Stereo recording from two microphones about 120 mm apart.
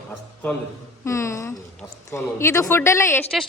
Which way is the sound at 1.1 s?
25° left (ahead or behind).